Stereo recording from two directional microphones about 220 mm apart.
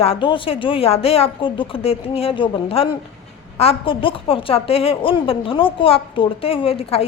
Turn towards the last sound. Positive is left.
turn(degrees=25)  # may be behind; listen again after turning